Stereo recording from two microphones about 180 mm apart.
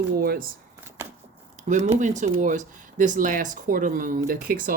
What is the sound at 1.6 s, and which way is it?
Speech, 45° right (ahead or behind).